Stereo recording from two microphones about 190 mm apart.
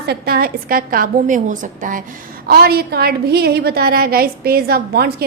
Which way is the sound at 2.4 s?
55° right (ahead or behind).